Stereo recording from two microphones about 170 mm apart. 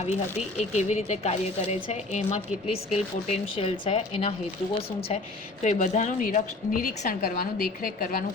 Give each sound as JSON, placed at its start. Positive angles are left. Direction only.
{"t": 0.0, "sound": "a woman's voice", "side_deg": 40}